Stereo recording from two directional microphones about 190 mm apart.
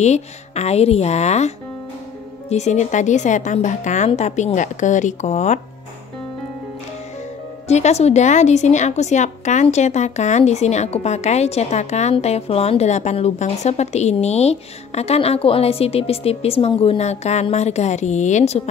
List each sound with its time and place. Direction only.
0.0 s speech: 35° left (ahead or behind)
2.5 s speech: 35° left (ahead or behind)
7.6 s speech: 35° left (ahead or behind)